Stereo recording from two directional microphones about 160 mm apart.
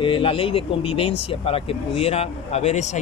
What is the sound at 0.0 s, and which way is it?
Speech, 35° left (ahead or behind).